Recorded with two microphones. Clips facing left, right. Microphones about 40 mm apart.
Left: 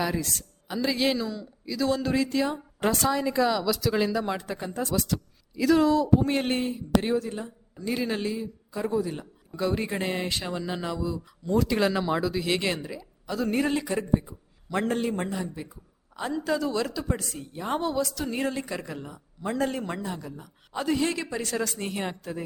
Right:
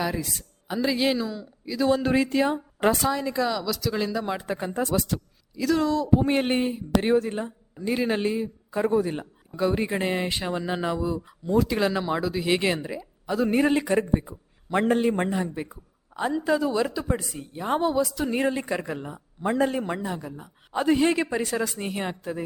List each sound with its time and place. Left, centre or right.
0.0 s a woman's voice: centre
3.1 s speech: centre
4.4 s a man's voice: centre
5.5 s speech: centre
6.1 s a man's voice: centre
7.1 s a man's voice: right
9.5 s a woman's voice: centre
11.4 s a woman's voice: centre
13.8 s a man's voice: right
16.1 s a woman's voice: centre
19.6 s a man's voice: centre
21.5 s a woman's voice: centre